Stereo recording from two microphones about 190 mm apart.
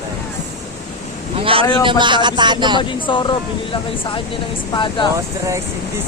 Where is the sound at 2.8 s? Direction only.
25° left (ahead or behind).